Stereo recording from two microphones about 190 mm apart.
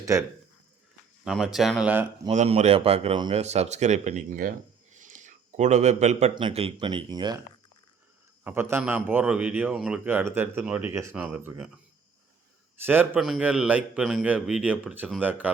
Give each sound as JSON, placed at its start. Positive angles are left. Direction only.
{"t": 0.0, "sound": "speech", "side_deg": -15}
{"t": 1.2, "sound": "speech", "side_deg": 0}
{"t": 2.3, "sound": "speech", "side_deg": -40}
{"t": 8.4, "sound": "speech", "side_deg": -10}
{"t": 12.8, "sound": "speech", "side_deg": -10}